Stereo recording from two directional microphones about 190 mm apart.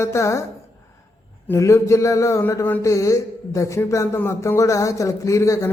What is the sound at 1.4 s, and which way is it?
Speech, 15° left (ahead or behind).